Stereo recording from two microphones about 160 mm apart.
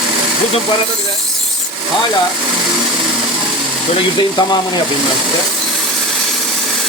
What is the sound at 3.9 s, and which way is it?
Speech, 25° left (ahead or behind).